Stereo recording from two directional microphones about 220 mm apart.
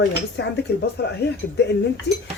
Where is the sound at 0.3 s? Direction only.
50° left (ahead or behind).